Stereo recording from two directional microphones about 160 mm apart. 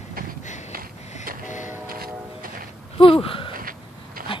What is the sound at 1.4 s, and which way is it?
Train, 50° left (ahead or behind).